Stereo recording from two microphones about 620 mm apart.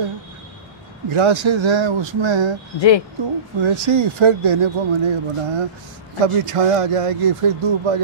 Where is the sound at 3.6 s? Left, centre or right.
Right.